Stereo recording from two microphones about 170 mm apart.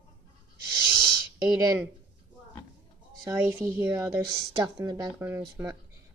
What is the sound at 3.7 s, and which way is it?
Speech, 15° right (ahead or behind).